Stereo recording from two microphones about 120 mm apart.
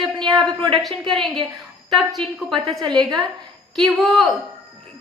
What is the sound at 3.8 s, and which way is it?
Speech, centre (ahead or behind).